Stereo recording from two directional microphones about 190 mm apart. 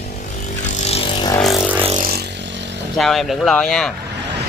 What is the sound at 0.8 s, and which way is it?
Vehicle, 30° left (ahead or behind).